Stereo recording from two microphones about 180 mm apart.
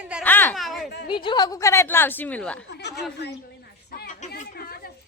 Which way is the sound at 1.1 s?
25° left (ahead or behind).